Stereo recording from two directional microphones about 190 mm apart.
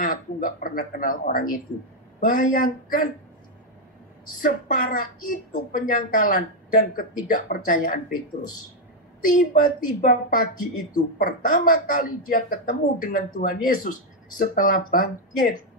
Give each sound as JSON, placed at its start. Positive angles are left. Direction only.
{"t": 0.0, "sound": "speech", "side_deg": 45}
{"t": 4.4, "sound": "speech", "side_deg": 45}
{"t": 9.3, "sound": "speech", "side_deg": 45}